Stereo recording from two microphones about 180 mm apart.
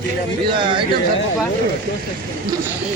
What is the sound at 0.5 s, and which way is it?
Speech, 25° right (ahead or behind).